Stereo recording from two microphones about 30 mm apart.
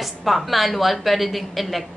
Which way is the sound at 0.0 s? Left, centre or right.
Centre.